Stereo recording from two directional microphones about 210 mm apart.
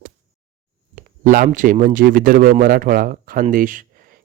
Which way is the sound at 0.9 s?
40° right (ahead or behind).